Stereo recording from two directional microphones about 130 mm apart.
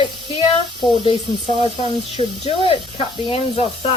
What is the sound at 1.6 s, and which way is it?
Speech, 40° right (ahead or behind).